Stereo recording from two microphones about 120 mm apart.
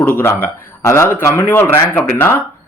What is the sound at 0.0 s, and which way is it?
Speech, 15° left (ahead or behind).